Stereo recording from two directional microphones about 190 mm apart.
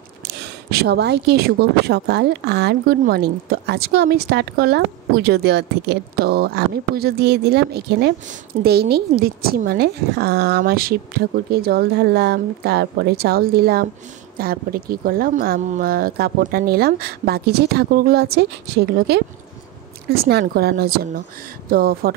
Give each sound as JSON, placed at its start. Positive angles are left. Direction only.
{"t": 0.7, "sound": "speech", "side_deg": -55}